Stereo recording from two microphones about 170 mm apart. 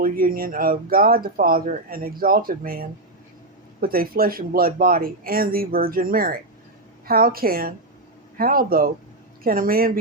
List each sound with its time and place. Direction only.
0.0 s speech: 55° right (ahead or behind)